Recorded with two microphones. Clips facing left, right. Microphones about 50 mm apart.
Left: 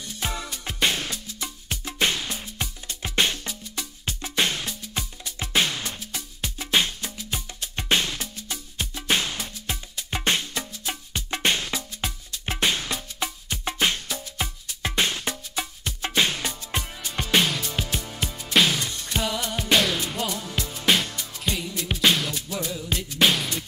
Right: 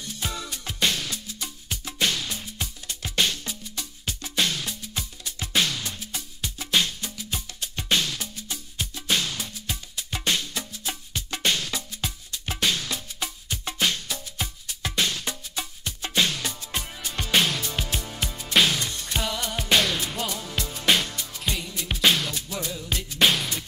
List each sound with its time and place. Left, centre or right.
0.2 s music: left
8.9 s music: left
17.3 s music: centre